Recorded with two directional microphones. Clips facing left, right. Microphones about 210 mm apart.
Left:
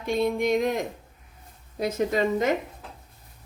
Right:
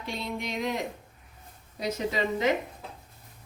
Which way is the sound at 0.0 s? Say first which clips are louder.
Left 10 dB; 50° left (ahead or behind).